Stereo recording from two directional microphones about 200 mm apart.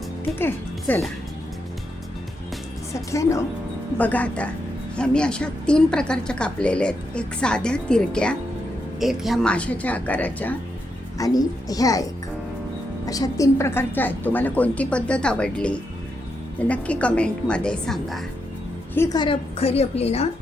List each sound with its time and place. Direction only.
0.3 s a woman's voice: 10° left (ahead or behind)
3.1 s a woman's voice: 15° left (ahead or behind)
18.9 s a woman's voice: 20° left (ahead or behind)